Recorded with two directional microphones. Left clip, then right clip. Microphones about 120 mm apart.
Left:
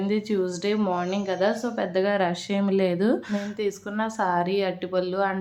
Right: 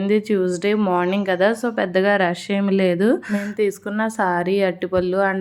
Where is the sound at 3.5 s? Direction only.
50° right (ahead or behind).